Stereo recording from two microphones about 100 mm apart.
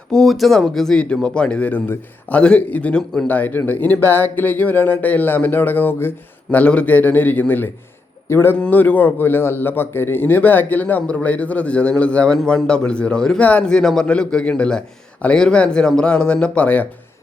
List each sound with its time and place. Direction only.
0.1 s a man's voice: 5° left (ahead or behind); by 8.5 s 25° left (ahead or behind)
8.5 s speech: 15° left (ahead or behind)